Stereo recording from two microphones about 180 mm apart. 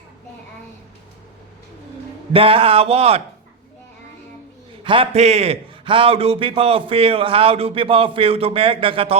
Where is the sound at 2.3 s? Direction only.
30° right (ahead or behind).